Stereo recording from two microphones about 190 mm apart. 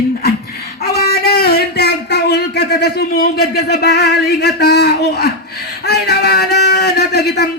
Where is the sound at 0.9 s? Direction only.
55° left (ahead or behind).